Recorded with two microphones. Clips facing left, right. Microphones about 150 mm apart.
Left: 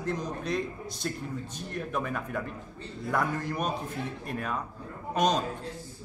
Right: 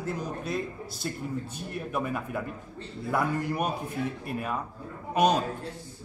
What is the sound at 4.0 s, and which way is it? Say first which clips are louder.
Speech: right 4 dB; 25° left (ahead or behind).